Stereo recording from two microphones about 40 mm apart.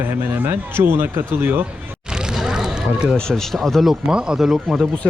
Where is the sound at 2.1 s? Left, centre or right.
Right.